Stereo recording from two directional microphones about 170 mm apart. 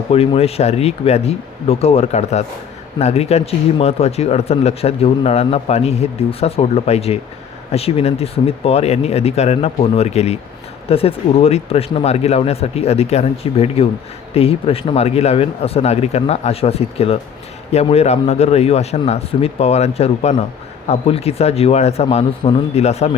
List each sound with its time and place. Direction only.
0.1 s speech: 35° left (ahead or behind)